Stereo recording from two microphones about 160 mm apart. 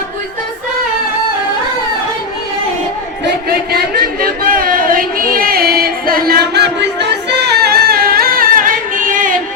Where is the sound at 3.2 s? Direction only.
80° right; by 9.3 s 55° right (ahead or behind).